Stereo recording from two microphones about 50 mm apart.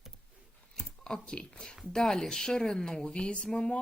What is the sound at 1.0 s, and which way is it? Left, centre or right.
A woman's voice, centre.